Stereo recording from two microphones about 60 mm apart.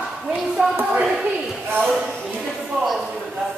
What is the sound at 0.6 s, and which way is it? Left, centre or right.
Music, centre.